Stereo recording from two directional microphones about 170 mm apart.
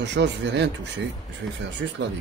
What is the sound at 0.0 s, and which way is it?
Speech, 90° right.